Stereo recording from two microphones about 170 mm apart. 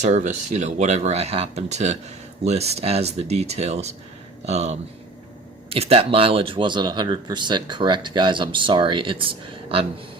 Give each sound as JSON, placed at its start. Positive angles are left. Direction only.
{"t": 0.0, "sound": "speech", "side_deg": -45}